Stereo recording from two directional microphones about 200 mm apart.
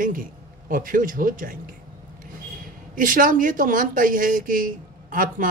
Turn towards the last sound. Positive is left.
turn(degrees=-45)  # may be behind; listen again after turning